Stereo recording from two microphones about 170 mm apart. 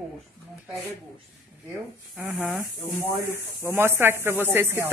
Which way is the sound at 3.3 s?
15° right (ahead or behind).